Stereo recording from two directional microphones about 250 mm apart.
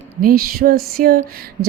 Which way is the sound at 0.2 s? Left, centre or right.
Right.